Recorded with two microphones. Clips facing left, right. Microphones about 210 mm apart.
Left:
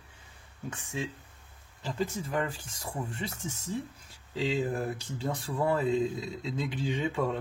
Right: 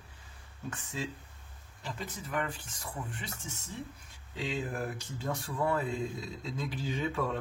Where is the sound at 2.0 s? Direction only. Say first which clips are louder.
Left 5 dB; 30° left (ahead or behind).